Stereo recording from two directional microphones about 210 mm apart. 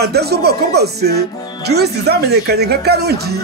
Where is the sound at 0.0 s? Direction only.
50° right (ahead or behind).